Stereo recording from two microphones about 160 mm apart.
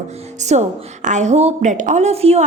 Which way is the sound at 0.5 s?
45° right (ahead or behind).